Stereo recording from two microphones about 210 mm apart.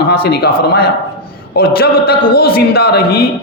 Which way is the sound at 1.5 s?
45° left (ahead or behind).